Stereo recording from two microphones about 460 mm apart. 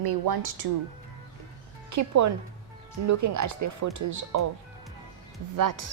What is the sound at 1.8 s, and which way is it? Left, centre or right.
Speech, right.